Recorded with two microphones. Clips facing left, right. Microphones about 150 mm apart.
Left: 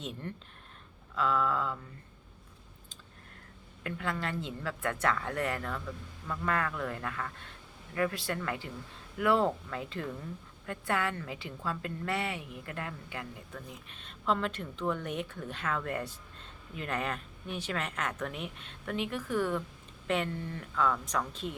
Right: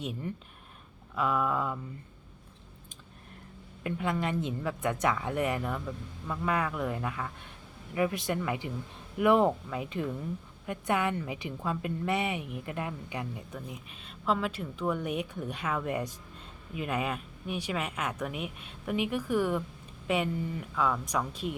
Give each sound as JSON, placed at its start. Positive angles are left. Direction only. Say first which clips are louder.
{"t": 0.0, "sound": "a woman's voice", "louder": "right 4 dB", "side_deg": -10}
{"t": 3.8, "sound": "a woman's voice", "louder": "right 4 dB", "side_deg": -20}